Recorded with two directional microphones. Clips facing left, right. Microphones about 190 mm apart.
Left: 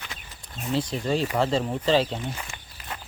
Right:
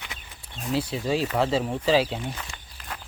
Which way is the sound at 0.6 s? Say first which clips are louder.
Even; 5° right (ahead or behind).